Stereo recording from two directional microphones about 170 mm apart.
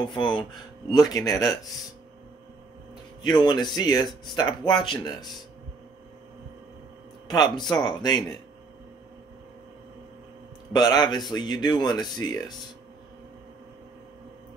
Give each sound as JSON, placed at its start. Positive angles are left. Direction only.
{"t": 0.0, "sound": "speech", "side_deg": 30}
{"t": 3.3, "sound": "speech", "side_deg": 25}
{"t": 7.2, "sound": "speech", "side_deg": 25}
{"t": 10.7, "sound": "speech", "side_deg": 25}